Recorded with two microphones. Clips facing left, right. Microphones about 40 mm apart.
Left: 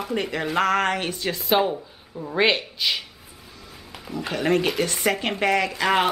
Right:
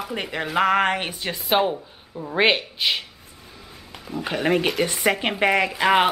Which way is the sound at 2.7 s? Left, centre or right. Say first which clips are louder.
Right 2 dB; centre.